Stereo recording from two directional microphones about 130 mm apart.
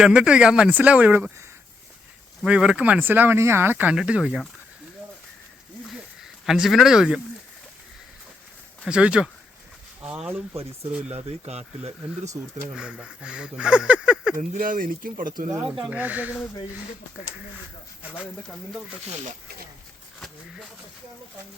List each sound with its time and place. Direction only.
0.0 s speech: 5° right (ahead or behind)
2.4 s speech: 5° right (ahead or behind)
6.2 s speech: 5° right (ahead or behind)
8.9 s speech: 10° right (ahead or behind)
11.1 s speech: 55° right (ahead or behind)
12.7 s speech: 10° right (ahead or behind)
14.3 s speech: 90° right
15.9 s speech: 10° right (ahead or behind)
19.0 s speech: 60° right (ahead or behind)
20.1 s speech: 5° left (ahead or behind)